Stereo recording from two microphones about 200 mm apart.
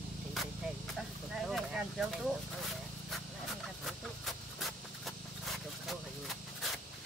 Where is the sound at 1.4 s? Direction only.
Centre (ahead or behind).